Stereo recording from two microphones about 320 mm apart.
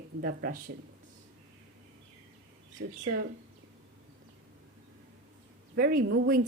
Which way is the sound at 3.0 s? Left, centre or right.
Right.